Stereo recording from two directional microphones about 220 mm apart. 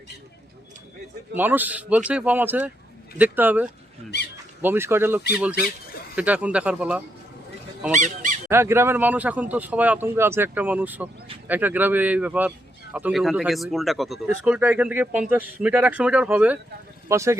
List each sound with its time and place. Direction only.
1.4 s a man's voice: 10° right (ahead or behind)
7.9 s speech: 35° right (ahead or behind)
8.4 s a man's voice: 10° right (ahead or behind)